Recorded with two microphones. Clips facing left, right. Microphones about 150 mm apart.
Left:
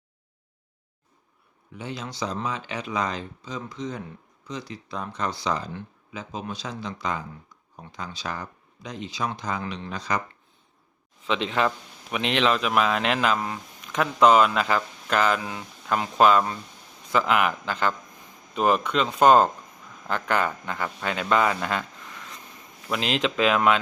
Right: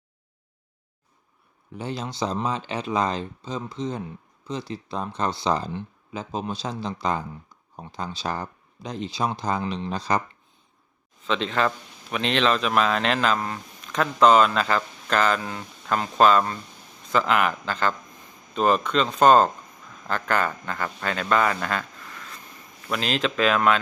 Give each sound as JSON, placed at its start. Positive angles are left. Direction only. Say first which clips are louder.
{"t": 1.7, "sound": "speech", "louder": "right 3 dB", "side_deg": -35}
{"t": 11.3, "sound": "speech", "louder": "even", "side_deg": 10}